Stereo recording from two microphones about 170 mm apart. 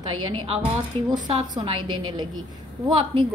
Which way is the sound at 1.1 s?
25° right (ahead or behind).